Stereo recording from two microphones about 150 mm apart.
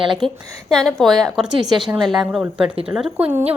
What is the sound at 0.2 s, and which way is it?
Speech, 35° right (ahead or behind).